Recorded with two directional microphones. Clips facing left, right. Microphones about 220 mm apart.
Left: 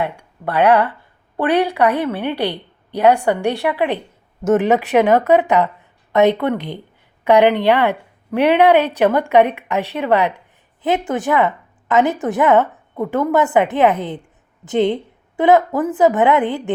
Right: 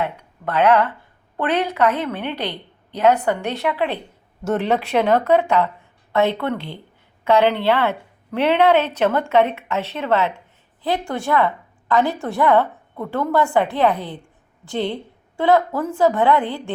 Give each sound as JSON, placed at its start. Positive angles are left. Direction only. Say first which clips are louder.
{"t": 0.0, "sound": "a woman's voice", "louder": "left 2 dB", "side_deg": 10}